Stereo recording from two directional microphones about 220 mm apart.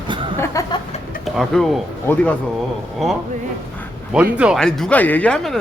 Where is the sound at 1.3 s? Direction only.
Centre (ahead or behind).